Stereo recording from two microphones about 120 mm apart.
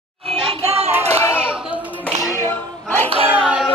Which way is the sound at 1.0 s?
25° left (ahead or behind).